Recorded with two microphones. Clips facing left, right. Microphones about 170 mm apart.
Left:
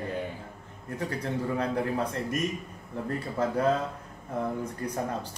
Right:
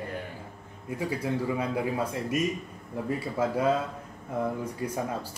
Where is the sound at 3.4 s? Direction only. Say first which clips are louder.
Even; 10° right (ahead or behind).